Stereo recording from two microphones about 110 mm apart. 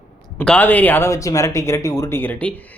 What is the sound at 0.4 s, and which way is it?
A man's voice, 15° left (ahead or behind).